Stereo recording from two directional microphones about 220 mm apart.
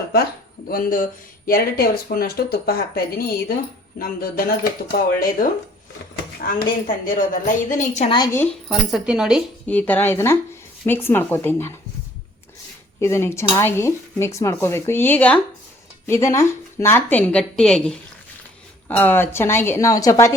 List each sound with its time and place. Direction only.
0.7 s a woman's voice: 40° left (ahead or behind); by 8.4 s 15° left (ahead or behind)
8.9 s speech: 5° right (ahead or behind)
9.6 s speech: 5° left (ahead or behind)
13.0 s speech: 10° left (ahead or behind)